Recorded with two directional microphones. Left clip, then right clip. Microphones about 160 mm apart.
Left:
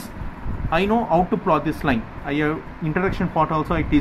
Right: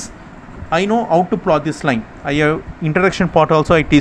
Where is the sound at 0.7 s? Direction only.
30° right (ahead or behind).